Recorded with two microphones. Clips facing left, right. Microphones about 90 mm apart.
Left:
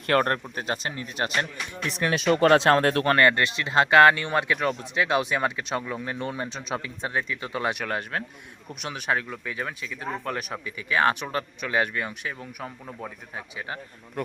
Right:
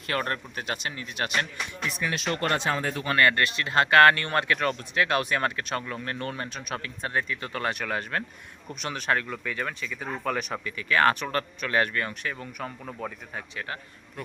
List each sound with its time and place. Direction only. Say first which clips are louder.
0.1 s speech: left 7 dB; 45° left (ahead or behind)
0.5 s speech: left 3 dB; 35° left (ahead or behind)
2.0 s speech: left 9 dB; 90° left; by 3.1 s 75° left (ahead or behind)
3.2 s speech: left 2 dB; 25° left (ahead or behind); by 13.4 s 5° left (ahead or behind)